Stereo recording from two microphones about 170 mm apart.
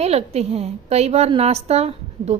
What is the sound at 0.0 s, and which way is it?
A woman's voice, 40° right (ahead or behind).